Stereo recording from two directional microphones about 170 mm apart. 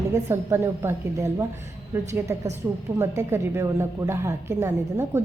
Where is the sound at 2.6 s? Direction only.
15° right (ahead or behind).